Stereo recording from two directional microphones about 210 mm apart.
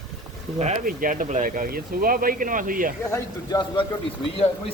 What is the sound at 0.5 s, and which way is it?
Speech, 30° right (ahead or behind).